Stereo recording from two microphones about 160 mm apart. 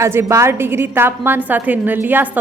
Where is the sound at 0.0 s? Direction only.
15° right (ahead or behind).